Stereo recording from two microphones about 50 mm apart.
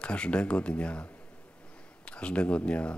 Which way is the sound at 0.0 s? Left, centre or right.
Left.